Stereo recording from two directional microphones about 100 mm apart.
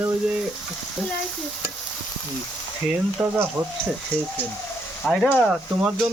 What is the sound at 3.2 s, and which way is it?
Speech, 15° right (ahead or behind).